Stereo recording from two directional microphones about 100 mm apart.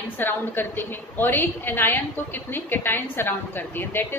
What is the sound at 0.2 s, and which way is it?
A woman's voice, 20° left (ahead or behind).